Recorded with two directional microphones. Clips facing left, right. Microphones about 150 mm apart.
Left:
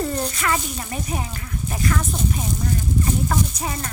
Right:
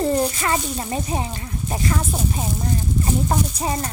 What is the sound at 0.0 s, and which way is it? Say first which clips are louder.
Speech: right 4 dB; 30° right (ahead or behind).